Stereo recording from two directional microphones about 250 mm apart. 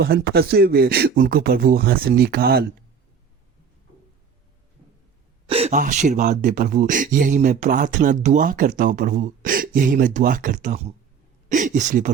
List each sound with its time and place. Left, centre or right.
0.0 s speech: right
5.5 s speech: right